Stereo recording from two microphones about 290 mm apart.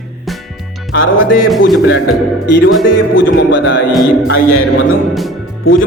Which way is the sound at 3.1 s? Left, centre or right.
Left.